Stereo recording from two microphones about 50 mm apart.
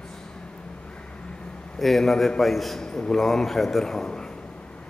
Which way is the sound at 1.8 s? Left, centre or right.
Centre.